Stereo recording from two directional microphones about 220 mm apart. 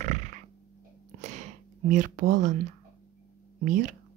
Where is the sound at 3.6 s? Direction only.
35° right (ahead or behind).